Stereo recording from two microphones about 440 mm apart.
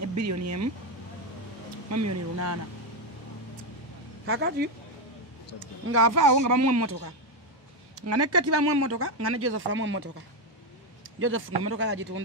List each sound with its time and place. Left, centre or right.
0.0 s speech: right
1.9 s speech: right
4.3 s speech: right
5.9 s speech: right
11.1 s speech: right